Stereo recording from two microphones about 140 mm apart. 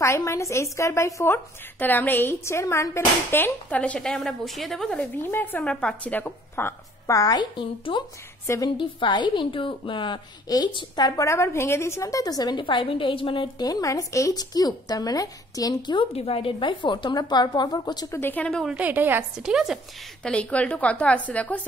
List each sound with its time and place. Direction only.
0.0 s a woman's voice: 20° left (ahead or behind)
18.2 s a woman's voice: 10° left (ahead or behind)
18.8 s a woman's voice: 10° right (ahead or behind)
20.2 s a woman's voice: 10° left (ahead or behind)